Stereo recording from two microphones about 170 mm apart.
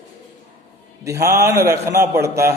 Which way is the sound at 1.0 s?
20° right (ahead or behind).